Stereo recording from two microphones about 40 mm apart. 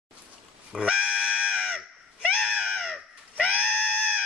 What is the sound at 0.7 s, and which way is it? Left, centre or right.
Music, right.